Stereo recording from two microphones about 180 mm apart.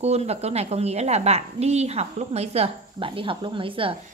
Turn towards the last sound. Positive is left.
turn(degrees=-30)  # may be behind; listen again after turning